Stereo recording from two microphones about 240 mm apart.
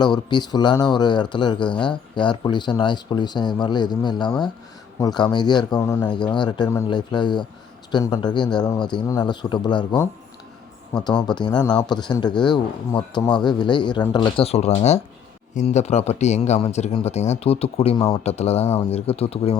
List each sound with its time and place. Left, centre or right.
0.0 s a man's voice: centre